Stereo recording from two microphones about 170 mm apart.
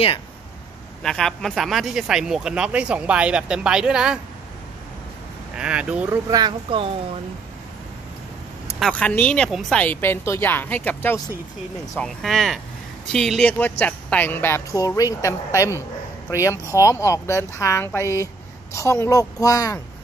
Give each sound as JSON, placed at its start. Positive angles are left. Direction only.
{"t": 1.0, "sound": "speech", "side_deg": 5}
{"t": 5.6, "sound": "speech", "side_deg": -5}
{"t": 6.3, "sound": "speech", "side_deg": -30}
{"t": 8.7, "sound": "speech", "side_deg": 5}